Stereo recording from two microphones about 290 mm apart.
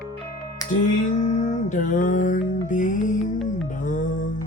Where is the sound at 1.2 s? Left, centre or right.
Left.